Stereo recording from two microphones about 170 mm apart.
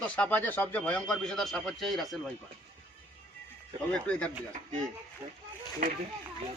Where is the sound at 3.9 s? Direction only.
5° left (ahead or behind).